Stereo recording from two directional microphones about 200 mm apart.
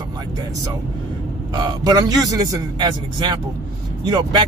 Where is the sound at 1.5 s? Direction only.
20° right (ahead or behind).